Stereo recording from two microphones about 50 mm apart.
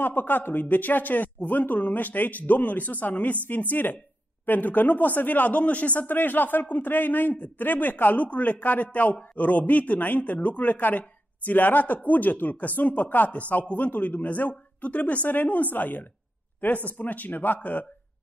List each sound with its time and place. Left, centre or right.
0.0 s speech: left